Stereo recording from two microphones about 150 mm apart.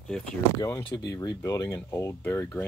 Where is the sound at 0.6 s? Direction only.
20° left (ahead or behind).